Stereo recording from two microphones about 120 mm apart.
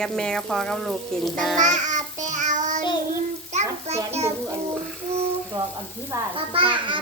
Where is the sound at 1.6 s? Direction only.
90° right.